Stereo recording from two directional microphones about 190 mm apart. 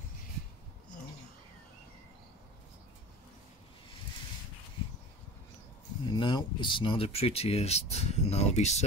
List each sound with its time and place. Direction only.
6.0 s speech: 25° left (ahead or behind)